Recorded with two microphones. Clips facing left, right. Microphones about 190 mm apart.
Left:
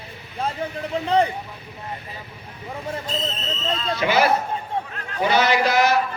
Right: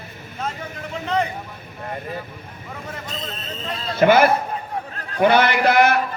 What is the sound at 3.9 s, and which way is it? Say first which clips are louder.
A man's voice: right 5 dB; 50° right (ahead or behind).